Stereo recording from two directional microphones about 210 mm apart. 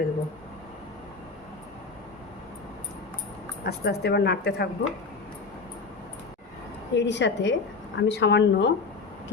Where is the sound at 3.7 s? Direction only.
50° left (ahead or behind).